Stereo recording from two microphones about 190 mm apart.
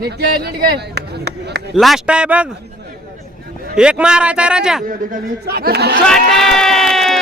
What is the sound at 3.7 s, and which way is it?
A man's voice, 5° right (ahead or behind).